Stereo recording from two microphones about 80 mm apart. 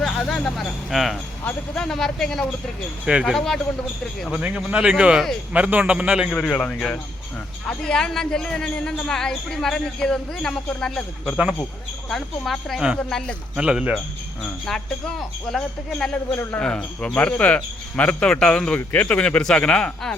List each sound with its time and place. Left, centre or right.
0.0 s speech: centre
4.3 s speech: centre
6.3 s speech: centre
13.6 s speech: centre
15.5 s speech: centre
16.3 s speech: left
16.6 s speech: centre